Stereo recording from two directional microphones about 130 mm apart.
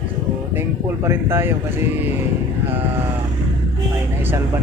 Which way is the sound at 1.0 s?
20° right (ahead or behind).